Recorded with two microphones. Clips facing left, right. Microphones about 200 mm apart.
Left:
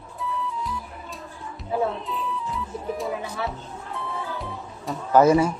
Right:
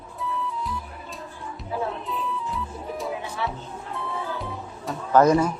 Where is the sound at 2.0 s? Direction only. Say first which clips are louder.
Even; centre (ahead or behind).